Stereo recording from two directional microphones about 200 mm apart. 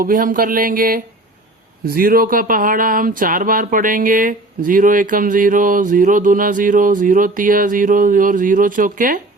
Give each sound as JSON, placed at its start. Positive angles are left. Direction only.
{"t": 0.0, "sound": "speech", "side_deg": -45}